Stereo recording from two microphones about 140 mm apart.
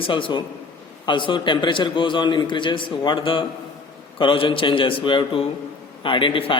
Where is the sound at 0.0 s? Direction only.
35° left (ahead or behind).